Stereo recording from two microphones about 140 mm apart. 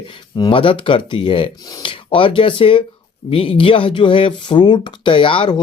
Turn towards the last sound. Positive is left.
turn(degrees=35)  # may be behind; listen again after turning